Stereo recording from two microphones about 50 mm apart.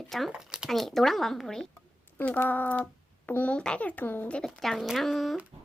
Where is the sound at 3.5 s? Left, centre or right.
Left.